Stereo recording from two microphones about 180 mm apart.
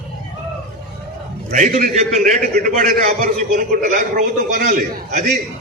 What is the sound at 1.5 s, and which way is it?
A man's voice, 45° right (ahead or behind).